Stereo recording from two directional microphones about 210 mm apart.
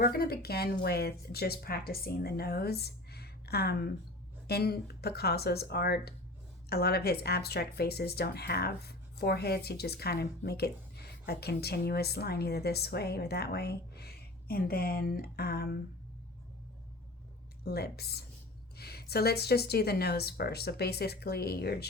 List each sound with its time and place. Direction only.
0.0 s speech: 45° left (ahead or behind)
17.7 s speech: 50° left (ahead or behind)